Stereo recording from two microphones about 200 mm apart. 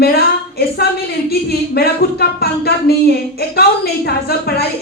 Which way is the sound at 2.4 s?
55° left (ahead or behind).